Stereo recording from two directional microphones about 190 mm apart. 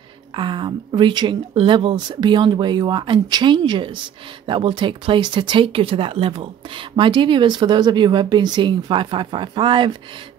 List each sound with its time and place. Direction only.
0.4 s speech: 25° right (ahead or behind)